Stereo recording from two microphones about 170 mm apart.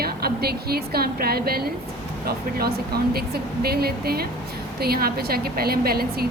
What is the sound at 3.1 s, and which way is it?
A woman's voice, 65° right (ahead or behind).